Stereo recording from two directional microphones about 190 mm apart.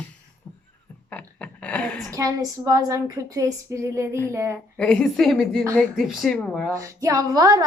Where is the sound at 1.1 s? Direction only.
5° left (ahead or behind).